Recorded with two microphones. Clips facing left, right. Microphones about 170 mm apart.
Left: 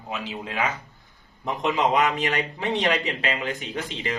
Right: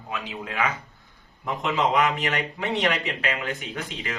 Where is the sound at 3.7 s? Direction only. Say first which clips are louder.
Left 3 dB; 30° left (ahead or behind).